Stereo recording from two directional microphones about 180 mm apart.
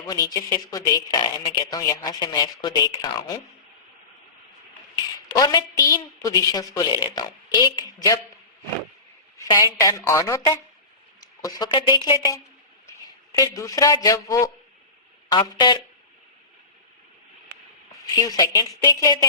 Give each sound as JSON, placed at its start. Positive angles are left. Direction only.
{"t": 0.1, "sound": "speech", "side_deg": 20}
{"t": 5.3, "sound": "speech", "side_deg": 25}
{"t": 9.4, "sound": "speech", "side_deg": 20}
{"t": 13.4, "sound": "speech", "side_deg": 20}
{"t": 18.0, "sound": "speech", "side_deg": 20}